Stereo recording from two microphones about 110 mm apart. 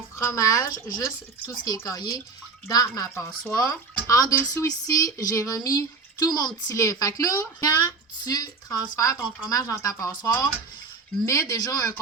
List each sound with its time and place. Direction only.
0.2 s a woman's voice: 30° left (ahead or behind)